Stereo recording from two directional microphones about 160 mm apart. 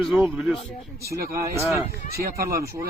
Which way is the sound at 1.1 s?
65° right (ahead or behind).